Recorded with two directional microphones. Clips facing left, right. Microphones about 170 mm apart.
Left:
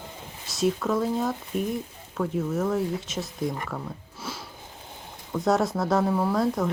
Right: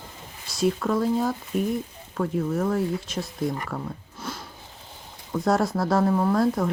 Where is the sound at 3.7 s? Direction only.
Centre (ahead or behind).